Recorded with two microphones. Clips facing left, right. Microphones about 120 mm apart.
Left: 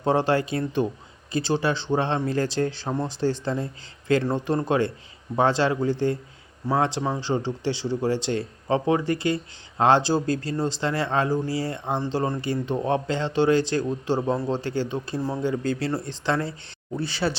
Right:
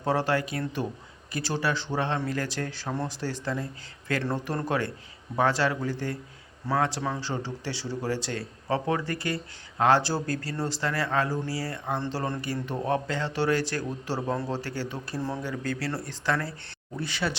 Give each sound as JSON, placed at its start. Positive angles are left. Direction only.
{"t": 0.0, "sound": "speech", "side_deg": 25}